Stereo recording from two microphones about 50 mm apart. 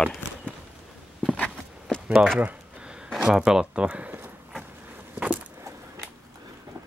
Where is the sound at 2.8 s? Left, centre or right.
Centre.